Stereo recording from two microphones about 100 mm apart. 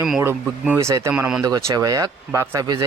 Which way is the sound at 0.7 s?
30° right (ahead or behind).